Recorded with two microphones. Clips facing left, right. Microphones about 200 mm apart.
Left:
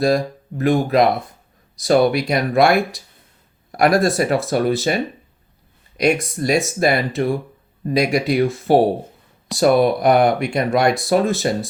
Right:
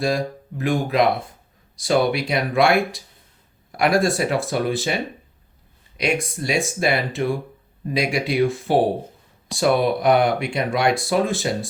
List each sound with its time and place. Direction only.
0.0 s speech: 40° left (ahead or behind)
6.0 s speech: 40° left (ahead or behind)